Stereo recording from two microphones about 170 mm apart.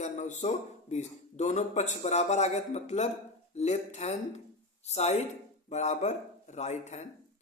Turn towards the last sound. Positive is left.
turn(degrees=40)  # may be behind; listen again after turning